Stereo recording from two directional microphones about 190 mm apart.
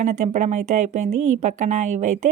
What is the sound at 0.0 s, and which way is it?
Speech, 40° right (ahead or behind).